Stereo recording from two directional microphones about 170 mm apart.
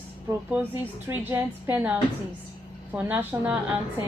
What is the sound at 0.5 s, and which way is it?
A woman's voice, 15° right (ahead or behind).